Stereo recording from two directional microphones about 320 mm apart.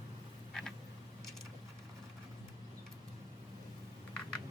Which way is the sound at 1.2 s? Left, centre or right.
Centre.